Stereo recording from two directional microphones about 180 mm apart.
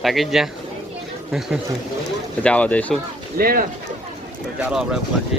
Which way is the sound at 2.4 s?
5° left (ahead or behind).